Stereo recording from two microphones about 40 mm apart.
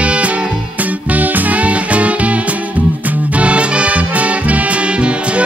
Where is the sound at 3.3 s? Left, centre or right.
Right.